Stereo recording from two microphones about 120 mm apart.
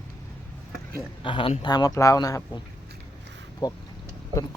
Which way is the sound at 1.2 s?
45° left (ahead or behind).